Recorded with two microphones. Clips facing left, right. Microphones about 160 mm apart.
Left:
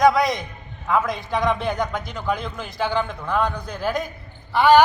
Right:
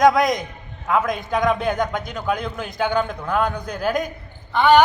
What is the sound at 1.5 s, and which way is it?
Speech, 15° right (ahead or behind).